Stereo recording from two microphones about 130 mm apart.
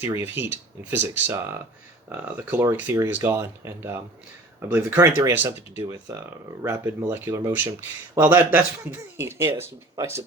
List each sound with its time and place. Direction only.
0.0 s speech: 15° right (ahead or behind)